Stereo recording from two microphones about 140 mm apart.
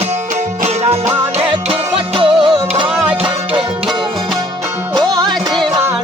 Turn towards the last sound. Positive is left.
turn(degrees=-30)  # may be behind; listen again after turning